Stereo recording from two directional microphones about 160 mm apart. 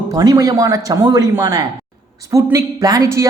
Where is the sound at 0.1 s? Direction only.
20° right (ahead or behind).